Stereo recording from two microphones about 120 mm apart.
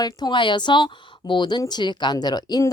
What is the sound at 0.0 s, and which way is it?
Speech, 35° left (ahead or behind).